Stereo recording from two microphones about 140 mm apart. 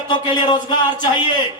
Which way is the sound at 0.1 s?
35° left (ahead or behind).